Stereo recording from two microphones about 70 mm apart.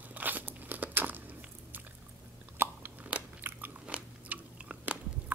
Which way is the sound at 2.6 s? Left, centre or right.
Right.